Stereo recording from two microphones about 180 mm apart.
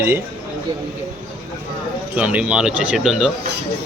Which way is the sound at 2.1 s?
5° right (ahead or behind).